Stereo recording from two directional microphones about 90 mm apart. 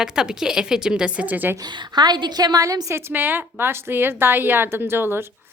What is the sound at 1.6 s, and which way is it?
A woman's voice, 50° right (ahead or behind).